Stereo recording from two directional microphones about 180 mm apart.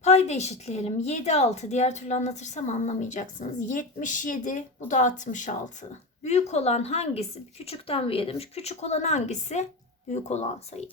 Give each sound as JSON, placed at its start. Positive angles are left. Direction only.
{"t": 0.0, "sound": "a woman's voice", "side_deg": 40}